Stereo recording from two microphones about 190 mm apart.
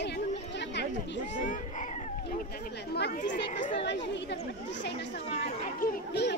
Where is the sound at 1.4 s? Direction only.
40° left (ahead or behind).